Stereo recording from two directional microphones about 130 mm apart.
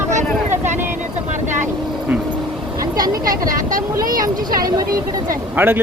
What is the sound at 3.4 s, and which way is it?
Speech, 90° right.